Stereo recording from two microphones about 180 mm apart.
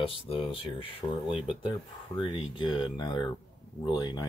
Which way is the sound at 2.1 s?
30° left (ahead or behind).